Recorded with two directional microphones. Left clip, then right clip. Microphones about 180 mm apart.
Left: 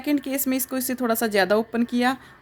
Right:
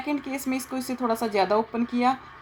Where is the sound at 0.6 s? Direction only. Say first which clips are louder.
Left 4 dB; 90° left.